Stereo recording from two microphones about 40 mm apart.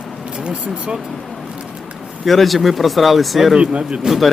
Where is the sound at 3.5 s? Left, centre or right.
Right.